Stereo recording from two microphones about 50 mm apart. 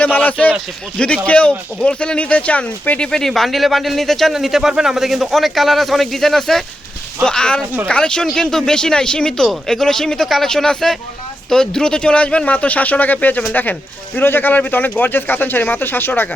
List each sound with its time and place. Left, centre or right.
0.0 s speech: left
3.0 s speech: centre
7.3 s speech: centre; by 16.3 s left